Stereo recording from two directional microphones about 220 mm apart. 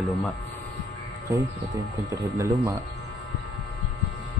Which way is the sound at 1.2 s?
15° right (ahead or behind).